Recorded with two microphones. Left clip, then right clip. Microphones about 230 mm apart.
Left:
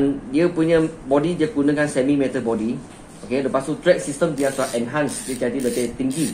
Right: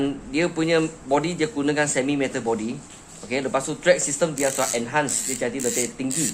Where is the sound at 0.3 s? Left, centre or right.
Right.